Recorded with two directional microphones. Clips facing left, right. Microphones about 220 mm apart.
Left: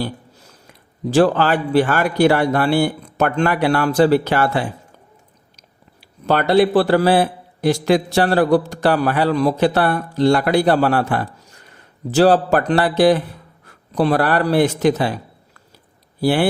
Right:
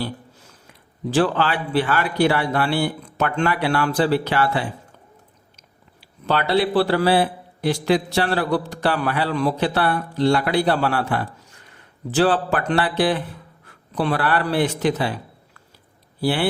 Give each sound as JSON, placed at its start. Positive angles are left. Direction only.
{"t": 1.1, "sound": "a man's voice", "side_deg": 45}
{"t": 6.2, "sound": "a man's voice", "side_deg": 45}
{"t": 16.2, "sound": "a man's voice", "side_deg": 45}